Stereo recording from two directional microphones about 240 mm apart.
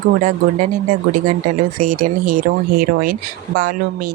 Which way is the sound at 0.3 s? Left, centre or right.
Right.